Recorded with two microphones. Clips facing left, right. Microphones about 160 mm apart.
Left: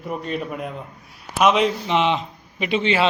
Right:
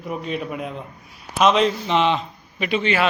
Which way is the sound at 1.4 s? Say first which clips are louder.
Even; 10° left (ahead or behind).